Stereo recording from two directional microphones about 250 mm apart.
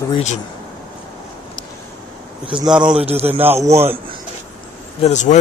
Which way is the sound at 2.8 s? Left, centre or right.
Right.